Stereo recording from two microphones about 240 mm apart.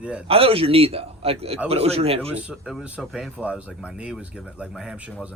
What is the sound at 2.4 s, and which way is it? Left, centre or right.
Speech, centre.